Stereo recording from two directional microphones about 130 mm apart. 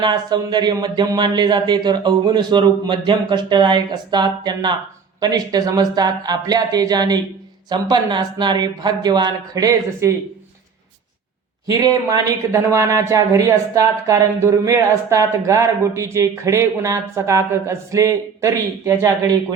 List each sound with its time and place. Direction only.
0.0 s speech: 30° right (ahead or behind)
11.7 s speech: 30° right (ahead or behind)